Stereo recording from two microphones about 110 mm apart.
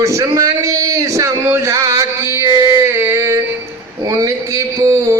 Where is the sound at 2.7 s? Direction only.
25° right (ahead or behind).